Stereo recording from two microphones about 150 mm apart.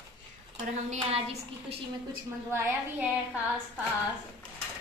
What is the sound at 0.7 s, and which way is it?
A woman's voice, 45° right (ahead or behind).